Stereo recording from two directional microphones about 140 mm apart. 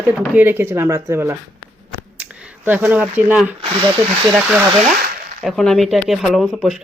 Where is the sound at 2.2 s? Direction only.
10° right (ahead or behind).